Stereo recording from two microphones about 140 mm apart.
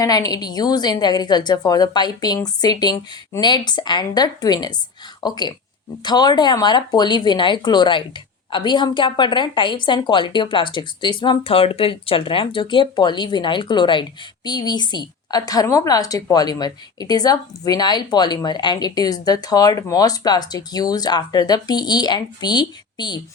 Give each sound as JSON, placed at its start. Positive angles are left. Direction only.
{"t": 0.0, "sound": "a woman's voice", "side_deg": 25}